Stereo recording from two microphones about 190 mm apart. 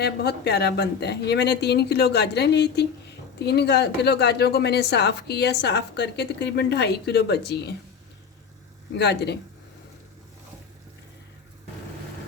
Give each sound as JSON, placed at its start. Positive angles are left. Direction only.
{"t": 0.0, "sound": "a woman's voice", "side_deg": 60}
{"t": 9.0, "sound": "a woman's voice", "side_deg": 60}